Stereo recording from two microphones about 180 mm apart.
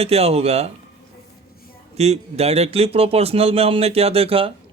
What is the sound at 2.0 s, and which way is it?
Speech, 35° right (ahead or behind).